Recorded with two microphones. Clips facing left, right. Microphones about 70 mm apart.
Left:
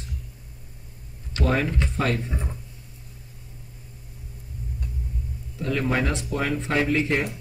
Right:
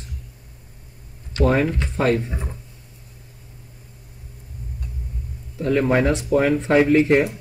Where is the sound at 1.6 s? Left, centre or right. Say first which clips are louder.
Right 5 dB; right.